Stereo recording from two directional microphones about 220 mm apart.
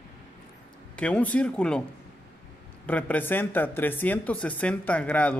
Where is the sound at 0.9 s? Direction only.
5° left (ahead or behind).